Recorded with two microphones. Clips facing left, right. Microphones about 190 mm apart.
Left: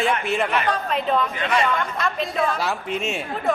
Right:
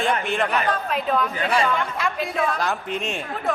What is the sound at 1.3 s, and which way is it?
Speech, 35° right (ahead or behind).